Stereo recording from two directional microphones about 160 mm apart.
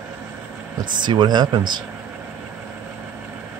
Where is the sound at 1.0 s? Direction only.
25° right (ahead or behind).